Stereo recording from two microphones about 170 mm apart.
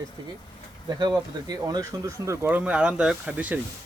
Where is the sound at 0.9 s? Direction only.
25° right (ahead or behind).